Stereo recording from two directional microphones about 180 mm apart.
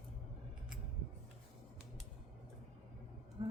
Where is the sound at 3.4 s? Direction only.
25° right (ahead or behind).